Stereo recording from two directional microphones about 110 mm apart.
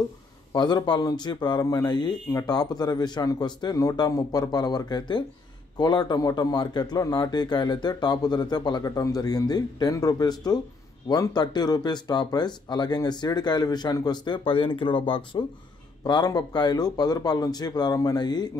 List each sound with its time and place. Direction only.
0.5 s speech: 40° left (ahead or behind)
16.0 s speech: 40° left (ahead or behind)